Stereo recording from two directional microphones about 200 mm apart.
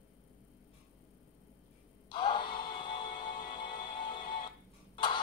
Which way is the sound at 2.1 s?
25° left (ahead or behind).